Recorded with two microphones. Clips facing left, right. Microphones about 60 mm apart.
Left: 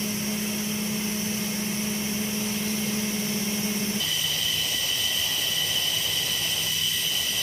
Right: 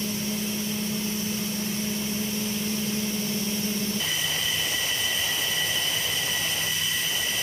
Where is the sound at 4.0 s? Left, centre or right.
Right.